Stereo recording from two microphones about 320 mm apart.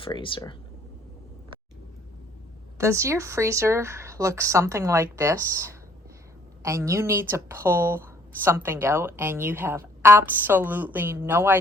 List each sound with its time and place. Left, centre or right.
0.0 s speech: centre
2.7 s speech: centre